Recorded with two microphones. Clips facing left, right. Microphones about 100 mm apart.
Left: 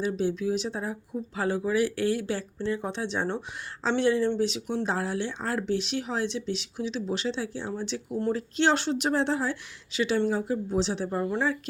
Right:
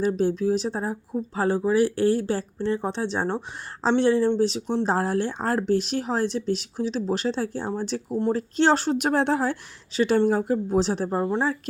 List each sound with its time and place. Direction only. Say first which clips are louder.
0.0 s speech: right 5 dB; 45° right (ahead or behind)
11.1 s speech: right 3 dB; 30° right (ahead or behind)